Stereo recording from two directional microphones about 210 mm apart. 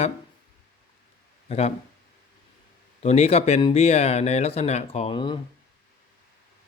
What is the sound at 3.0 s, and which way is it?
Speech, 30° left (ahead or behind).